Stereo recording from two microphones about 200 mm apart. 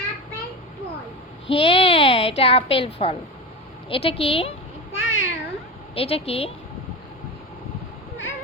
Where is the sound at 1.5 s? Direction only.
30° left (ahead or behind).